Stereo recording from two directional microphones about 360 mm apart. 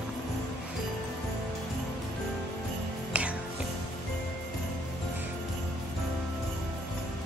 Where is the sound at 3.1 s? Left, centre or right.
Centre.